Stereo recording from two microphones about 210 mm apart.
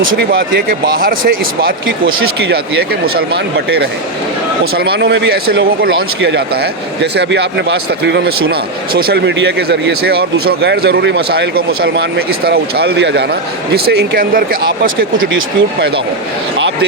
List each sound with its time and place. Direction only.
0.2 s speech: 45° right (ahead or behind)
3.2 s speech: 50° right (ahead or behind)
15.2 s speech: 70° right (ahead or behind)